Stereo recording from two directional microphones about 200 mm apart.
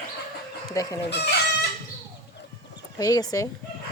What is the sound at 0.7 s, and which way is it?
Speech, 15° left (ahead or behind).